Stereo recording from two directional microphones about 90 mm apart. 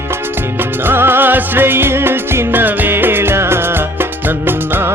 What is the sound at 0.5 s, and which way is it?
Music, 25° right (ahead or behind).